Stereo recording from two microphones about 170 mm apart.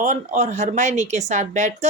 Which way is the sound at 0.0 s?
45° right (ahead or behind).